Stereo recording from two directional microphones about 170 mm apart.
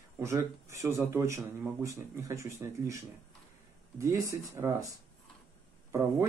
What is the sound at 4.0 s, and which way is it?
Speech, 20° right (ahead or behind).